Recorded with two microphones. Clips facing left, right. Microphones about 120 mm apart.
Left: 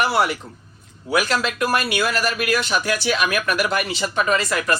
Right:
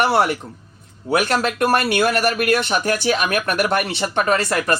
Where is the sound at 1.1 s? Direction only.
55° right (ahead or behind).